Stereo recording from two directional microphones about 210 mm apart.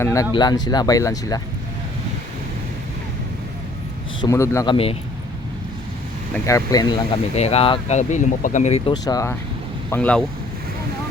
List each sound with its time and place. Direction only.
0.0 s speech: 15° left (ahead or behind)
4.2 s a man's voice: 15° left (ahead or behind)
6.3 s speech: 15° left (ahead or behind)
7.3 s speech: 30° left (ahead or behind)
8.9 s speech: 15° left (ahead or behind)